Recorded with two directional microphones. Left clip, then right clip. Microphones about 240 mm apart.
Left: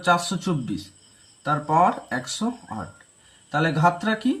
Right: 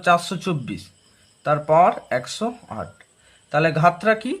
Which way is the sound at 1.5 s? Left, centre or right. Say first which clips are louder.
Right 4 dB; right.